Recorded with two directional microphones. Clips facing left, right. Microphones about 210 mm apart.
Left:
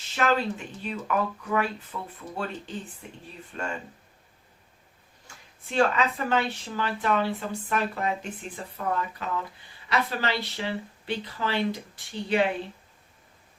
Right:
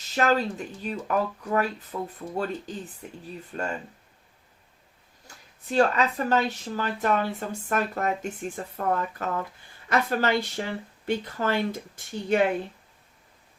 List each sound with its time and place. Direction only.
0.1 s speech: 40° right (ahead or behind)
5.7 s speech: 40° right (ahead or behind)